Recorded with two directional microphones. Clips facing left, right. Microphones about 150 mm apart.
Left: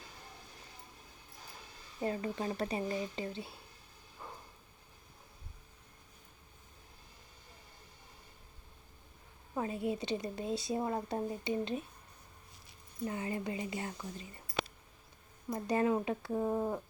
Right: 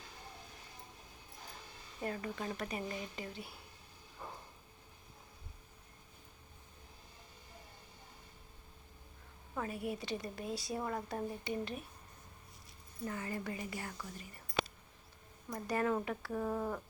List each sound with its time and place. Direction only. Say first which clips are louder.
2.0 s a woman's voice: left 4 dB; 25° left (ahead or behind)
9.6 s a woman's voice: left 4 dB; 25° left (ahead or behind)
13.1 s a woman's voice: left 3 dB; 20° left (ahead or behind)
15.5 s a woman's voice: left 3 dB; 25° left (ahead or behind)